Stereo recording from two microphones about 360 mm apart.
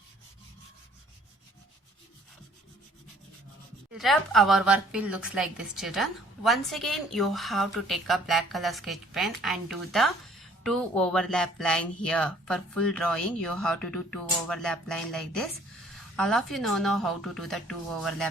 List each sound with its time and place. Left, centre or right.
3.9 s a woman's voice: centre